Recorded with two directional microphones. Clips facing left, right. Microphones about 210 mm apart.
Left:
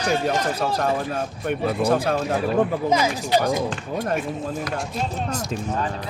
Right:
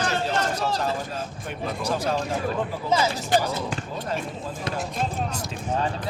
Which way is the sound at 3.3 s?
50° right (ahead or behind).